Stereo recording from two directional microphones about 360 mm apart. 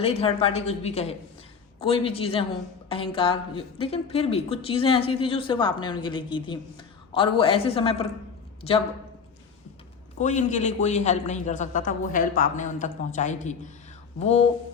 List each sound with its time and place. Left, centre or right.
0.0 s a woman's voice: centre
10.2 s a man's voice: centre